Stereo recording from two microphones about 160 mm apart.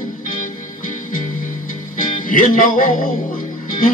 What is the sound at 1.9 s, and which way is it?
Music, 55° left (ahead or behind).